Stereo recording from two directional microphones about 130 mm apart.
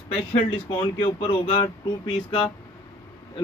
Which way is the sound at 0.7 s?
35° left (ahead or behind).